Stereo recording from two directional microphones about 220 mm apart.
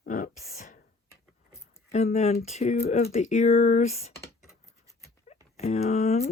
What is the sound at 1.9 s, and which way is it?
Speech, 30° left (ahead or behind).